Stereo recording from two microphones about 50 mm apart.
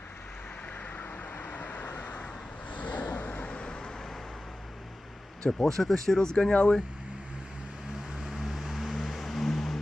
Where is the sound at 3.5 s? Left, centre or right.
Left.